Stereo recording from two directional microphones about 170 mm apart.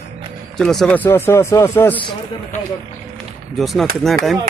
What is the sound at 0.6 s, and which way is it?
Speech, 5° left (ahead or behind).